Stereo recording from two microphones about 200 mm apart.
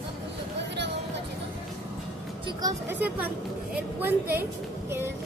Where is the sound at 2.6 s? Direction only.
15° right (ahead or behind).